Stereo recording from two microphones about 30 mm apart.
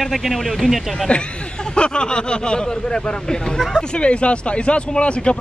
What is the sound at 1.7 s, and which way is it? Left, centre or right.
Speech, left.